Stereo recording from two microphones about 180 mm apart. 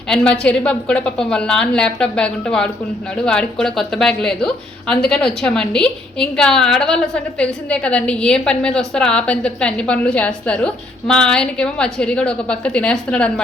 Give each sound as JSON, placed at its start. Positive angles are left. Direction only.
{"t": 0.1, "sound": "a woman's voice", "side_deg": 5}